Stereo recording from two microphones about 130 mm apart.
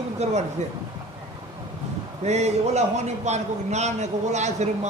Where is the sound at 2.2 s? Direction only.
60° right (ahead or behind).